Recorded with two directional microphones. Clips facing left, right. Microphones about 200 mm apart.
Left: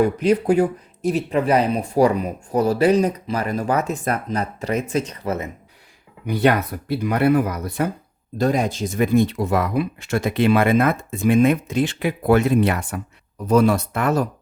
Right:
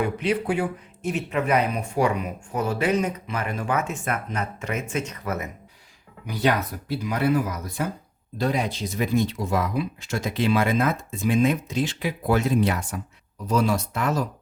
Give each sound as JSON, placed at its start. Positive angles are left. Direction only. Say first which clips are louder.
{"t": 0.0, "sound": "speech", "louder": "left 7 dB", "side_deg": 40}
{"t": 6.2, "sound": "speech", "louder": "left 5 dB", "side_deg": 55}
{"t": 8.4, "sound": "speech", "louder": "left 5 dB", "side_deg": 45}